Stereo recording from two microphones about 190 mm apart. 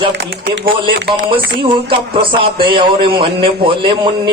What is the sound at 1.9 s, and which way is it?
A man's voice, 25° right (ahead or behind).